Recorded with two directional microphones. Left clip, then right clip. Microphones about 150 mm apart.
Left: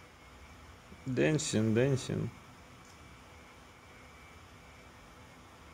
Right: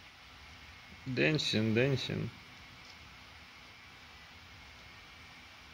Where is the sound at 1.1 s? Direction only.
5° left (ahead or behind).